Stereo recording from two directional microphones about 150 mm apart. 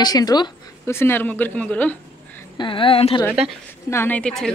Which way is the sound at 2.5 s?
35° left (ahead or behind).